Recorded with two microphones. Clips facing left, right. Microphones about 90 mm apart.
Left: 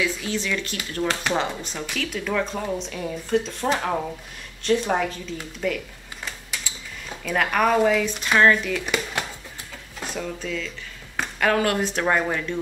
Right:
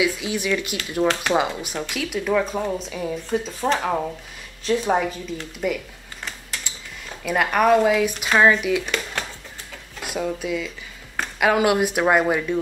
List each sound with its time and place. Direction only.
0.0 s speech: 15° right (ahead or behind)
1.3 s speech: 10° right (ahead or behind)
7.1 s speech: 5° right (ahead or behind)
8.8 s speech: 5° left (ahead or behind)
9.9 s speech: 10° right (ahead or behind)